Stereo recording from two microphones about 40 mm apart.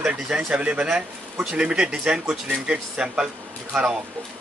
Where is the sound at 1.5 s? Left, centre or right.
Right.